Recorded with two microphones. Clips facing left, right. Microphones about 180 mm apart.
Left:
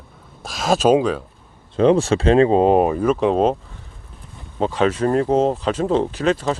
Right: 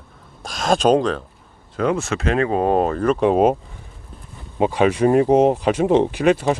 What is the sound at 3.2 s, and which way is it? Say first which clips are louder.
Speech: right 2 dB; 10° right (ahead or behind).